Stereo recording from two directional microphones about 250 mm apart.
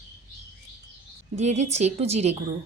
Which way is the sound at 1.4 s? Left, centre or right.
Right.